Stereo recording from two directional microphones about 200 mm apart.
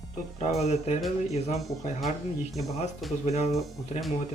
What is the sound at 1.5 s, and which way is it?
Speech, centre (ahead or behind).